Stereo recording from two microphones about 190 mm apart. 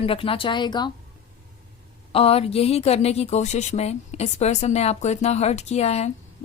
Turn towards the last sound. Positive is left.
turn(degrees=35)  # may be behind; listen again after turning